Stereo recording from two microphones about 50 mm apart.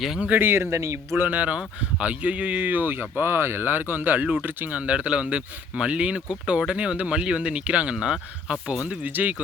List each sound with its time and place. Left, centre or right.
0.3 s a man's voice: right
1.3 s speech: right
8.9 s speech: right